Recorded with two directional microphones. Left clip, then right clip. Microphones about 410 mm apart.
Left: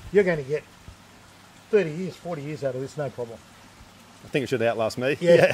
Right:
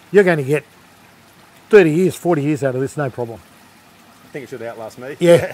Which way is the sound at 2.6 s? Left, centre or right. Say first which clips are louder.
Right 9 dB; right.